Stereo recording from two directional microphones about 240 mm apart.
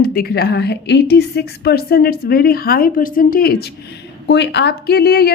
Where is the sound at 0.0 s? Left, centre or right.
Left.